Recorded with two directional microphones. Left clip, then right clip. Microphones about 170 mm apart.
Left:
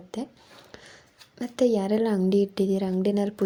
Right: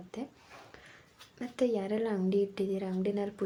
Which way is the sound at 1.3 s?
40° left (ahead or behind).